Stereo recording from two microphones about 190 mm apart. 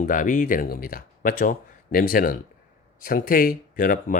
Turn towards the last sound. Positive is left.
turn(degrees=50)  # may be behind; listen again after turning